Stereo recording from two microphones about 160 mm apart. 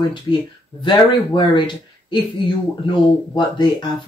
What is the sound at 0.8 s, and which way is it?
Speech, 30° left (ahead or behind).